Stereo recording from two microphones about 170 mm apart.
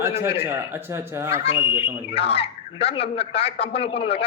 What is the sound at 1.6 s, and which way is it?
Speech, 10° right (ahead or behind).